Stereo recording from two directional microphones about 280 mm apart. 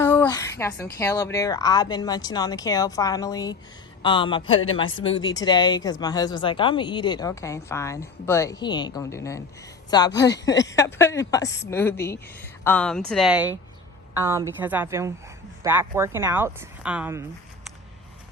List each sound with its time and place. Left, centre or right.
0.0 s a sound: centre
0.9 s a woman's voice: centre
4.5 s speech: left
5.0 s a woman's voice: centre